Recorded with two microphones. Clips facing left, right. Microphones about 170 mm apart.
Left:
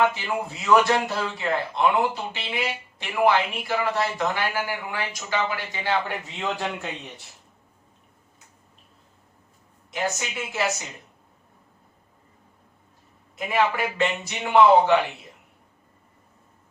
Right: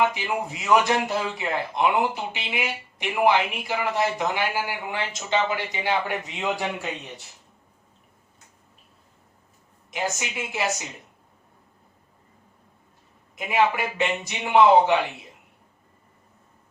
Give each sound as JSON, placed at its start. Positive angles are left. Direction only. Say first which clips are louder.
{"t": 0.0, "sound": "a man's voice", "louder": "left 1 dB", "side_deg": -15}
{"t": 9.9, "sound": "a man's voice", "louder": "left 1 dB", "side_deg": -15}
{"t": 13.3, "sound": "a man's voice", "louder": "right 1 dB", "side_deg": -15}